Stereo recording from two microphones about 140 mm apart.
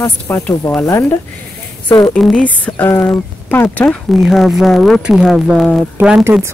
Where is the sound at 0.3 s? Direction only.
15° left (ahead or behind).